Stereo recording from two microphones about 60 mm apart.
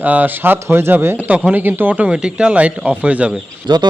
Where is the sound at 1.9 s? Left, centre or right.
Centre.